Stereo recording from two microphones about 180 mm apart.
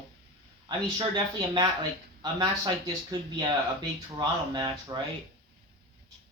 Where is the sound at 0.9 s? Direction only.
20° right (ahead or behind).